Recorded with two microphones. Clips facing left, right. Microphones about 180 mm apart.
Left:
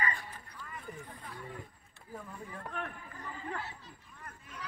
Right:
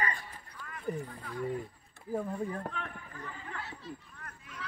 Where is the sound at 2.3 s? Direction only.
45° right (ahead or behind).